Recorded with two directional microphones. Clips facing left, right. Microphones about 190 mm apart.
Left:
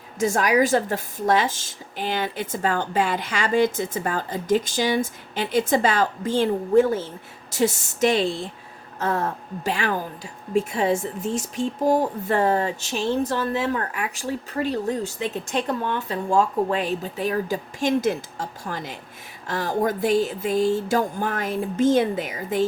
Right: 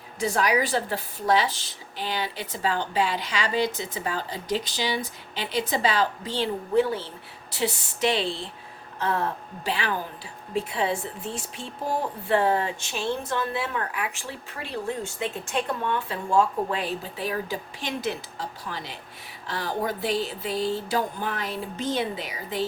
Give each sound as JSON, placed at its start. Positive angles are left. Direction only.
{"t": 0.2, "sound": "speech", "side_deg": 45}